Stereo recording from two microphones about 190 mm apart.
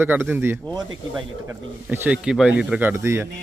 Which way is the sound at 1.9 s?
10° right (ahead or behind).